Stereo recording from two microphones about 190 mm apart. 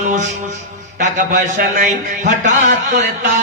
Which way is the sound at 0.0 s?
40° right (ahead or behind).